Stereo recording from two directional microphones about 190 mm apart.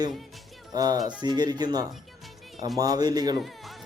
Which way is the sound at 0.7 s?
20° right (ahead or behind).